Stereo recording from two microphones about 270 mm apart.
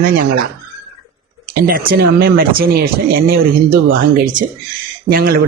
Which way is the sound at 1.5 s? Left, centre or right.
Right.